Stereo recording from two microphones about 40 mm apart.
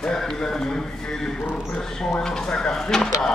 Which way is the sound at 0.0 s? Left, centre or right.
Centre.